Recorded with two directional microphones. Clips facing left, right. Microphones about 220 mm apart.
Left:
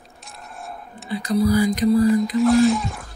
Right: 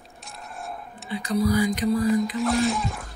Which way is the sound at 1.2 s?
40° left (ahead or behind).